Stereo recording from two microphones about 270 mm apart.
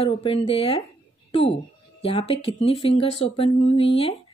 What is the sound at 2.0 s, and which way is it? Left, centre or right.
Speech, left.